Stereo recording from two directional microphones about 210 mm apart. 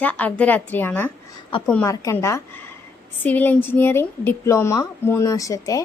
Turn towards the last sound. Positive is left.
turn(degrees=15)  # may be behind; listen again after turning